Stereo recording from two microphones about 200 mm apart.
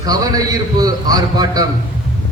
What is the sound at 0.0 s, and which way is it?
A man's voice, 20° right (ahead or behind).